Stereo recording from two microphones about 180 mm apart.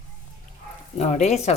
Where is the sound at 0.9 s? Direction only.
40° left (ahead or behind).